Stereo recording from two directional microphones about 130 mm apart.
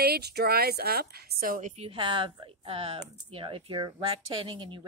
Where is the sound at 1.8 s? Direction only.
40° right (ahead or behind).